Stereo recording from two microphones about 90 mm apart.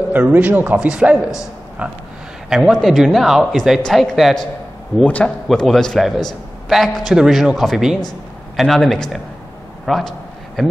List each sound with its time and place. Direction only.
0.1 s a man's voice: 20° right (ahead or behind)
2.5 s speech: 5° right (ahead or behind)
5.0 s a man's voice: 15° left (ahead or behind)
9.8 s a sound: centre (ahead or behind)